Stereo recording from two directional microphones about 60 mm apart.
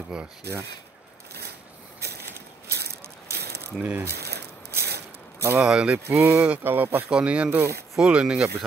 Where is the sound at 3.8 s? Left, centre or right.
Right.